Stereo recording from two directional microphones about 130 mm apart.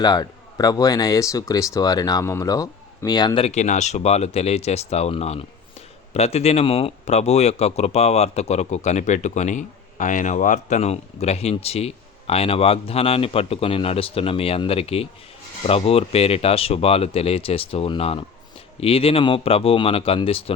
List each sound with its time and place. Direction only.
0.0 s speech: 30° left (ahead or behind)
3.4 s speech: 65° left (ahead or behind); by 20.4 s 45° left (ahead or behind)